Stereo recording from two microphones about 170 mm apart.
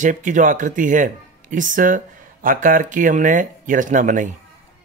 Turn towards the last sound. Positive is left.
turn(degrees=-50)  # may be behind; listen again after turning